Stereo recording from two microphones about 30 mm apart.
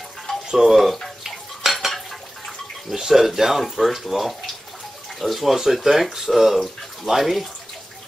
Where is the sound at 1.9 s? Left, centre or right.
Centre.